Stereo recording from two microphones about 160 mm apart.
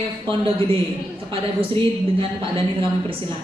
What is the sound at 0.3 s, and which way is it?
A man's voice, 35° right (ahead or behind).